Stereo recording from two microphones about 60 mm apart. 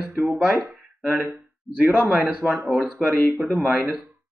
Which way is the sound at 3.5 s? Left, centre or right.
Right.